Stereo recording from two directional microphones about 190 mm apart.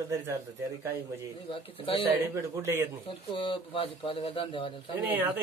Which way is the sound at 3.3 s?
25° left (ahead or behind).